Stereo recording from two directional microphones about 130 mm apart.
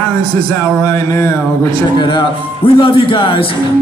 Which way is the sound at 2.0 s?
40° left (ahead or behind).